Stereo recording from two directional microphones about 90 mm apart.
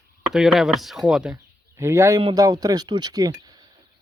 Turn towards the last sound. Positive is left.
turn(degrees=-45)  # may be behind; listen again after turning